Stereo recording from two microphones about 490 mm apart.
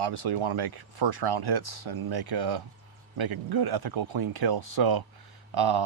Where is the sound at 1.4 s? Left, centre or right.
Right.